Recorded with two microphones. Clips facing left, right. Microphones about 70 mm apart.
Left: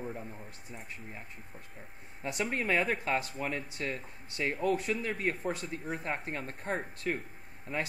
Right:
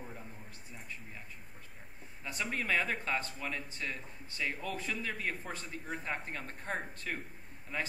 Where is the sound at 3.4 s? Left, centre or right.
Left.